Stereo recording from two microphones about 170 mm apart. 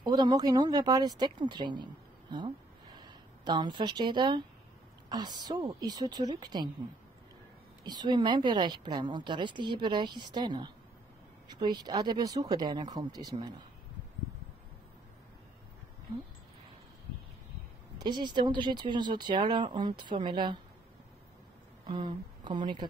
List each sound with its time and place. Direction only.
0.0 s a woman's voice: 25° right (ahead or behind)
2.3 s a sound: 25° right (ahead or behind)
5.1 s a woman's voice: 25° right (ahead or behind)
7.8 s a woman's voice: 25° right (ahead or behind)
17.9 s a woman's voice: 25° right (ahead or behind)
21.8 s speech: 30° right (ahead or behind)